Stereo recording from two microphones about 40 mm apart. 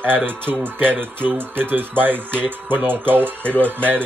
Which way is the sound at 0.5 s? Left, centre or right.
Right.